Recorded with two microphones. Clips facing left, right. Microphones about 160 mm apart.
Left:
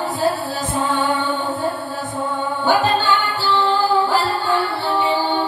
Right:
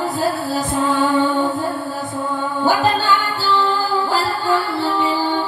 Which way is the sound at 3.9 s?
40° right (ahead or behind).